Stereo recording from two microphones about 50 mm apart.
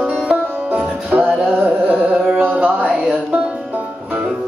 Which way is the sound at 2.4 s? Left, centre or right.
Right.